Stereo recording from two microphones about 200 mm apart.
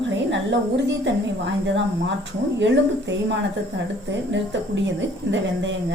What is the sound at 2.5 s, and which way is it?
A woman's voice, 60° right (ahead or behind).